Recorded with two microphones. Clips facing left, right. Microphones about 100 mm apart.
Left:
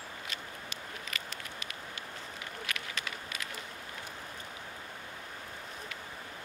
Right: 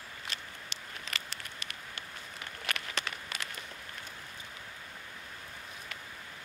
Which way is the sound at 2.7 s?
65° right (ahead or behind).